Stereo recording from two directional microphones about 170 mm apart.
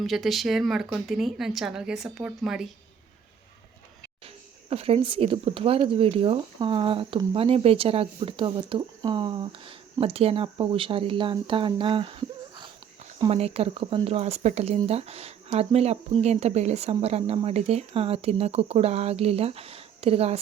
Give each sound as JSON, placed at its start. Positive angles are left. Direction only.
{"t": 0.0, "sound": "speech", "side_deg": 0}
{"t": 4.7, "sound": "speech", "side_deg": -35}